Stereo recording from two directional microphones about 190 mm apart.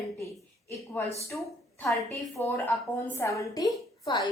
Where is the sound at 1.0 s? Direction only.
10° left (ahead or behind).